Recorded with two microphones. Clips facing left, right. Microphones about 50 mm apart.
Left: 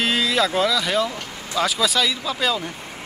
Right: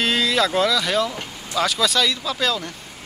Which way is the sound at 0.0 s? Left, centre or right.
Centre.